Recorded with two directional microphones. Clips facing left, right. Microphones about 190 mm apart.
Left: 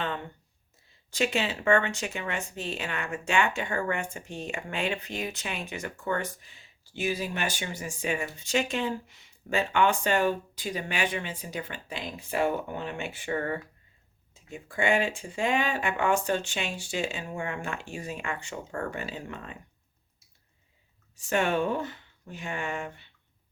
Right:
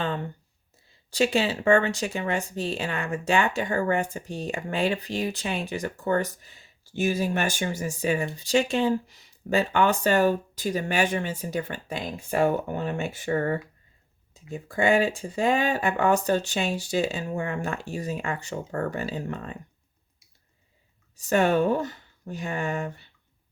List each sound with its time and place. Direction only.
0.0 s speech: 30° right (ahead or behind)
21.2 s speech: 40° right (ahead or behind)